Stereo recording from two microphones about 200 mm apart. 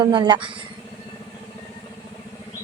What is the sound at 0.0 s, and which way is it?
Speech, 20° right (ahead or behind).